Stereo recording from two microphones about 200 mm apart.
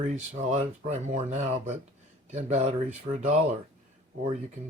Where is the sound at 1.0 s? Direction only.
35° right (ahead or behind).